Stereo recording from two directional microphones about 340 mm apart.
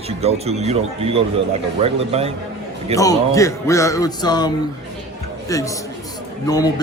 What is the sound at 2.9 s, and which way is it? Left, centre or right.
Speech, centre.